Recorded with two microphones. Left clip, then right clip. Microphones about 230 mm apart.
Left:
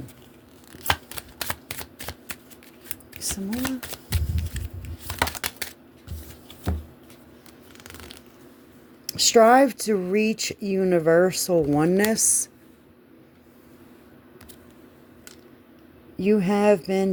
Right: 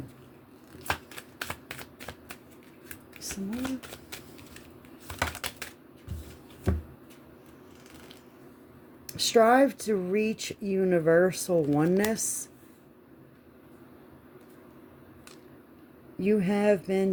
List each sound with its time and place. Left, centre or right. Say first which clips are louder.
0.9 s shuffling cards: left 7 dB; left
3.2 s a sound: left 6 dB; left
5.0 s typing: left 6 dB; left
9.0 s speech: left 6 dB; left
16.1 s speech: left 5 dB; left